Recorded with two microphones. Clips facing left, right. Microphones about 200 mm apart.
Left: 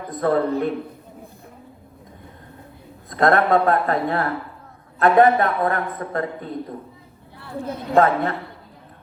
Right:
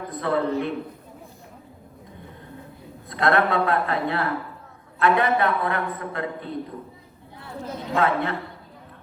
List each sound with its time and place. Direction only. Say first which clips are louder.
0.1 s a man's voice: left 4 dB; 45° left (ahead or behind)
3.1 s a man's voice: left 4 dB; 45° left (ahead or behind)
7.9 s a man's voice: left 5 dB; 45° left (ahead or behind)